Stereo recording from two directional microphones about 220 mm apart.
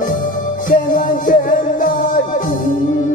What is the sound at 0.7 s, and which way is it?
Music, 40° left (ahead or behind).